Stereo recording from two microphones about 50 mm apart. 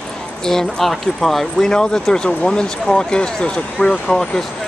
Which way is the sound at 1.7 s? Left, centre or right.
Centre.